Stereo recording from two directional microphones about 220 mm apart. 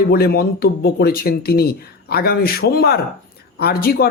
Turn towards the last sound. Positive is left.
turn(degrees=45)  # may be behind; listen again after turning